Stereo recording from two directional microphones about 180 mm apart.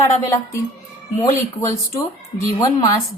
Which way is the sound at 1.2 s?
20° left (ahead or behind).